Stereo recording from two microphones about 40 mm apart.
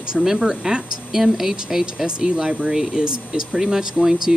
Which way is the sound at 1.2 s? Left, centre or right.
Centre.